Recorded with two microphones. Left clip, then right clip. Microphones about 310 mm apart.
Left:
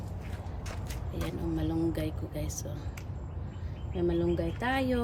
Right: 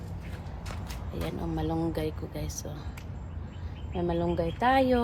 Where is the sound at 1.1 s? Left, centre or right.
Centre.